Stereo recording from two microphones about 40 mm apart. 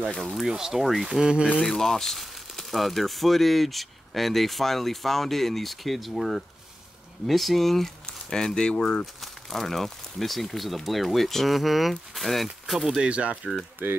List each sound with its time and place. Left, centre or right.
0.2 s speech: centre
0.5 s speech: centre
1.6 s speech: centre
9.0 s speech: centre
13.0 s speech: right
13.8 s speech: right